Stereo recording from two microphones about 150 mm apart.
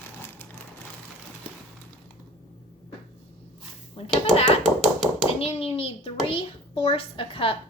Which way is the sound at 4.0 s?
40° left (ahead or behind).